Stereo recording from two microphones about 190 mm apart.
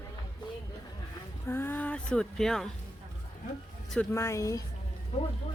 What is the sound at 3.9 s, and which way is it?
Speech, 15° left (ahead or behind).